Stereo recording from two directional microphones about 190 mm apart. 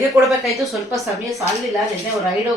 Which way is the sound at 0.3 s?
Centre (ahead or behind).